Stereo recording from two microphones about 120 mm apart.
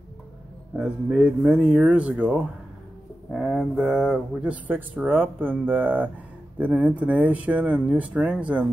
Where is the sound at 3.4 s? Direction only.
5° right (ahead or behind).